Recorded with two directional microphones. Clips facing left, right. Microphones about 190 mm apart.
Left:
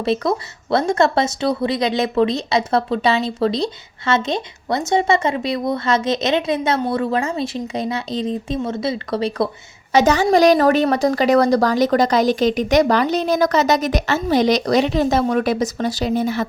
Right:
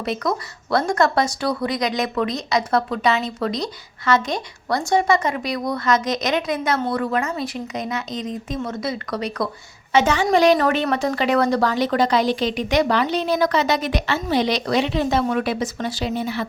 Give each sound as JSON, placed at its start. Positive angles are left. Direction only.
{"t": 0.0, "sound": "speech", "side_deg": 30}
{"t": 9.9, "sound": "a woman's voice", "side_deg": 40}